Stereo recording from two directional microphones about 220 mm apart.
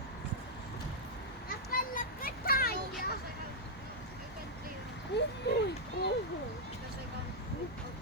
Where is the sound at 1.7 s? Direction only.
40° left (ahead or behind).